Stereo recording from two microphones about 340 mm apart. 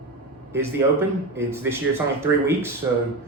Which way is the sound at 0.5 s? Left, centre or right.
Centre.